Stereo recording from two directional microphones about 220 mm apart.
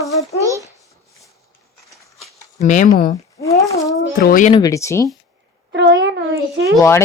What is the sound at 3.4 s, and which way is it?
Speech, 15° left (ahead or behind).